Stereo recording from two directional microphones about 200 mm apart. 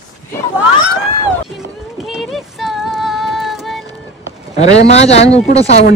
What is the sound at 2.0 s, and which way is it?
Child singing, centre (ahead or behind).